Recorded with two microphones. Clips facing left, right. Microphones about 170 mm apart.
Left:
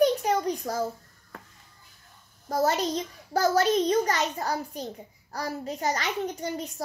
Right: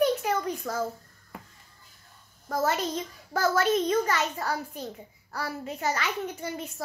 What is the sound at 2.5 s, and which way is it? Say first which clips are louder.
A child's voice: left 2 dB; 35° left (ahead or behind).